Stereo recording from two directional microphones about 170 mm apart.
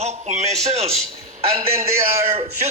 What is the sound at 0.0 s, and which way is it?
Speech, 40° right (ahead or behind).